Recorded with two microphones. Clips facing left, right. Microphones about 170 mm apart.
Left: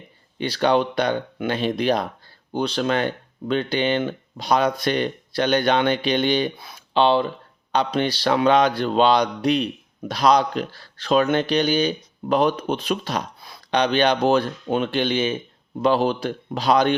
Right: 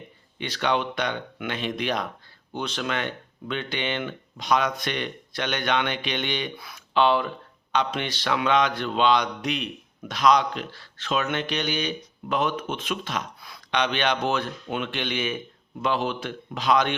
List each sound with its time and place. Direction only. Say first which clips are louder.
0.3 s speech: left 6 dB; 35° left (ahead or behind)